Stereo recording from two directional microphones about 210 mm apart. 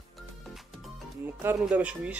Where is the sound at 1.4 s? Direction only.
5° right (ahead or behind).